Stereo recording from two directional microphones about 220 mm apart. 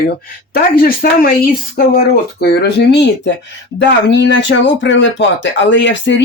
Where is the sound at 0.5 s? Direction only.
40° left (ahead or behind).